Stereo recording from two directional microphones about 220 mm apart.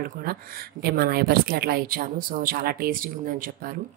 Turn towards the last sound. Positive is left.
turn(degrees=-40)  # may be behind; listen again after turning